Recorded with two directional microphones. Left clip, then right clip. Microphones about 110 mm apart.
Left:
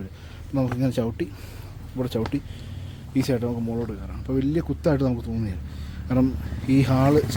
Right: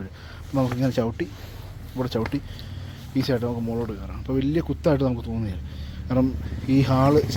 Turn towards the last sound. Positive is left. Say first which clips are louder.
# right 1 dB
turn(degrees=35)  # may be behind; listen again after turning